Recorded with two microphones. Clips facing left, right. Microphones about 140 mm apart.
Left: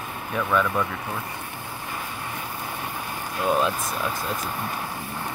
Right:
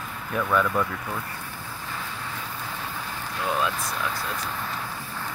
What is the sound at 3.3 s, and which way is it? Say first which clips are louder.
Speech: left 4 dB; 15° left (ahead or behind).